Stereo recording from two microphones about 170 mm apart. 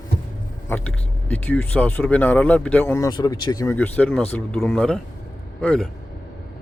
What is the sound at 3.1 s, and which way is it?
Speech, 25° left (ahead or behind).